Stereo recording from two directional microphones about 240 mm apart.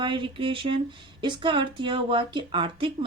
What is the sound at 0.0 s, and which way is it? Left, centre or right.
Speech, right.